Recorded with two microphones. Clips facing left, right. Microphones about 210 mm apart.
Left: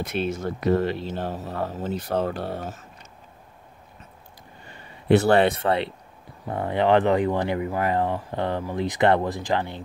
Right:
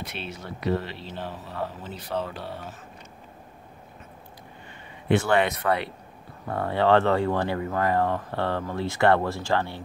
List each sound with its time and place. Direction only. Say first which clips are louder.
0.0 s speech: left 10 dB; 45° left (ahead or behind)
5.0 s speech: left 5 dB; 40° left (ahead or behind); by 9.8 s 20° left (ahead or behind)